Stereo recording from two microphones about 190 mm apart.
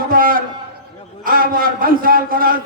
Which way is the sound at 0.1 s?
50° right (ahead or behind).